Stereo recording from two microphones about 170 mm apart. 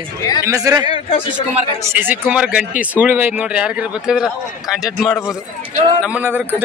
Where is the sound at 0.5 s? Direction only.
20° right (ahead or behind).